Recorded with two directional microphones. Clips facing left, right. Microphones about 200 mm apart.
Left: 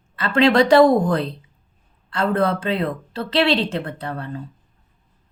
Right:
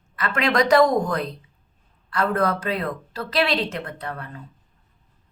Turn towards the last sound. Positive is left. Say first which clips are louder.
# left 5 dB
turn(degrees=30)  # may be behind; listen again after turning